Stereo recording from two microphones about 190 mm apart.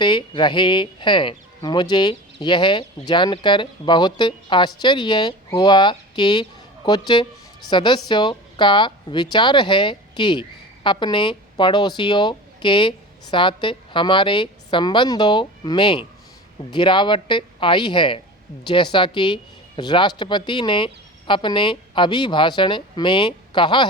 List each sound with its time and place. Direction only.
0.0 s a woman's voice: 25° left (ahead or behind)